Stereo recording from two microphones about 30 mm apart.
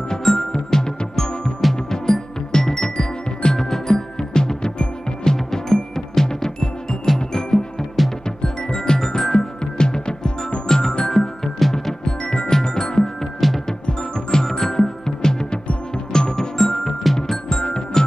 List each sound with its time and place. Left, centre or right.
0.2 s music: centre
0.5 s music: left
11.1 s music: centre
12.0 s music: left
17.5 s music: left